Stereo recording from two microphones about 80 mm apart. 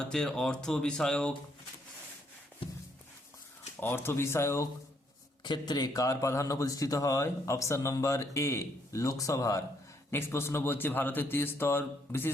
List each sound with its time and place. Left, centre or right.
0.0 s speech: centre
3.8 s speech: left
5.4 s a man's voice: left
5.9 s speech: left
10.1 s speech: left